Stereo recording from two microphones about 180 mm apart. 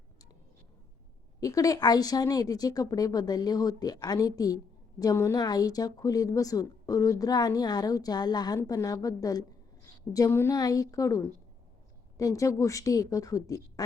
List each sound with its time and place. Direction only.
1.4 s a woman's voice: 20° left (ahead or behind)